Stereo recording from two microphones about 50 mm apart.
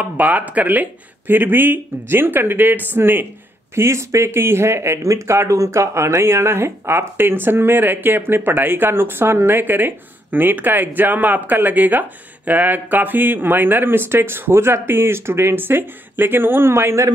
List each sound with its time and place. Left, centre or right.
0.0 s speech: right
3.7 s speech: right